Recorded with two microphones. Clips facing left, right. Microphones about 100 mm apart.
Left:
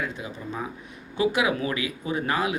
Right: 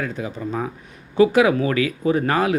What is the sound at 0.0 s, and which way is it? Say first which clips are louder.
Speech: right 6 dB; 40° right (ahead or behind).